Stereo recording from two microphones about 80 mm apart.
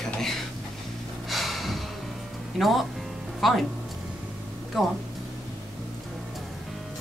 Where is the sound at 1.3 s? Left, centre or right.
Centre.